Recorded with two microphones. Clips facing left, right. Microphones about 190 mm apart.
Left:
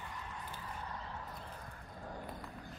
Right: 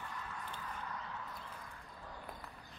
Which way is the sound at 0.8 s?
30° left (ahead or behind).